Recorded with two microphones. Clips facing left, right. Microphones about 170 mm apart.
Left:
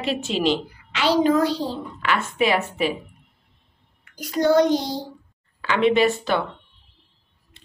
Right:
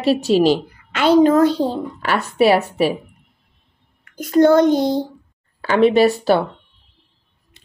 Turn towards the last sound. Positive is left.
turn(degrees=-35)  # may be behind; listen again after turning